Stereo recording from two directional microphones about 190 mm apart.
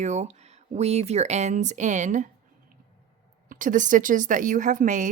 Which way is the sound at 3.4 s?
45° right (ahead or behind).